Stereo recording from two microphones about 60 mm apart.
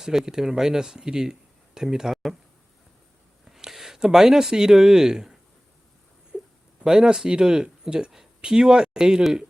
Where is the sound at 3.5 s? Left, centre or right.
Centre.